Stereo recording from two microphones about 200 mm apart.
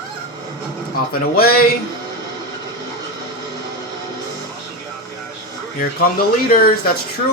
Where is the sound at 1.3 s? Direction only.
50° left (ahead or behind).